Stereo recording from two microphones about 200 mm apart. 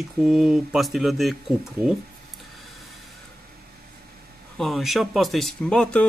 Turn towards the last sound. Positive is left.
turn(degrees=5)  # may be behind; listen again after turning